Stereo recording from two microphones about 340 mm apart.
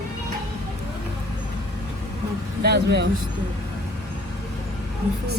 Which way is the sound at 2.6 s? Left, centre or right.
Right.